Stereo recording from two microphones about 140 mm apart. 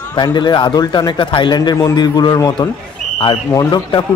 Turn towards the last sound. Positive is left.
turn(degrees=30)  # may be behind; listen again after turning